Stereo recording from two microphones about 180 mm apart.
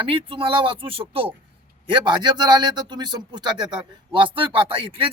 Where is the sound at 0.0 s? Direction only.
30° right (ahead or behind).